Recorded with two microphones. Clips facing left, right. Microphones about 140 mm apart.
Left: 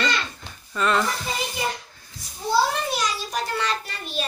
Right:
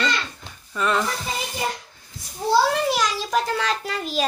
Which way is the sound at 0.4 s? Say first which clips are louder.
Even; 5° right (ahead or behind).